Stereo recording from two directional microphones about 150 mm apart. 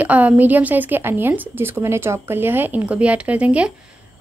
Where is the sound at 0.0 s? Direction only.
10° right (ahead or behind).